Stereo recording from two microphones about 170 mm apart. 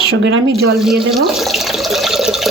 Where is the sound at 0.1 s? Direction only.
90° right.